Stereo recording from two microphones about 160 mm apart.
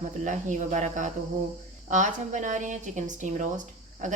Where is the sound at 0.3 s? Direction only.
50° right (ahead or behind).